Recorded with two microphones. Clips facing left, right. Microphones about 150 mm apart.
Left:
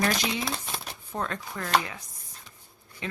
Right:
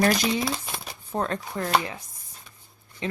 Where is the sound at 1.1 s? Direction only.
35° right (ahead or behind).